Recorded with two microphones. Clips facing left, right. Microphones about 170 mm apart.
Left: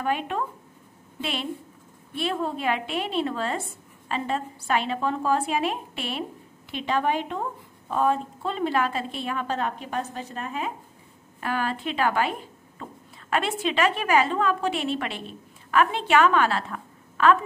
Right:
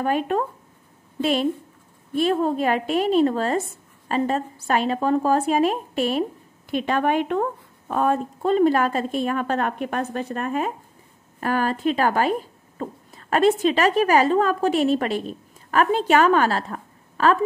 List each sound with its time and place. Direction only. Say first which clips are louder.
0.0 s a woman's voice: right 5 dB; 40° right (ahead or behind)